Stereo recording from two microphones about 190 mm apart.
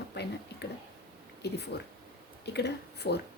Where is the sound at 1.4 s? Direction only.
60° left (ahead or behind).